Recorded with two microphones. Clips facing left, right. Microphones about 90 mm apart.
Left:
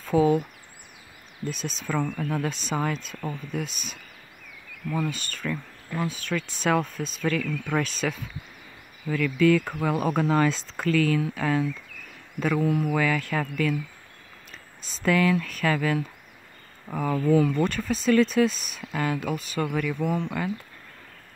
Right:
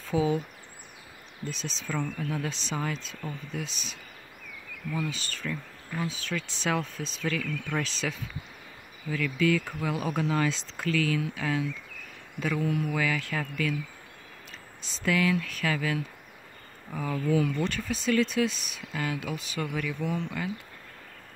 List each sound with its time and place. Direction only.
0.1 s speech: 55° left (ahead or behind)
1.5 s speech: 50° left (ahead or behind)